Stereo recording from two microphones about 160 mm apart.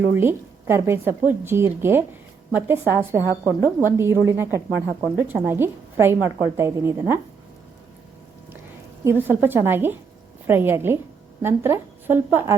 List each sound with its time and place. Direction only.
0.1 s speech: 15° right (ahead or behind)
9.0 s speech: 15° right (ahead or behind)